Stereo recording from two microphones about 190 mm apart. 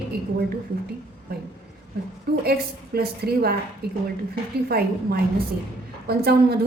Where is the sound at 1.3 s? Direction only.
55° right (ahead or behind).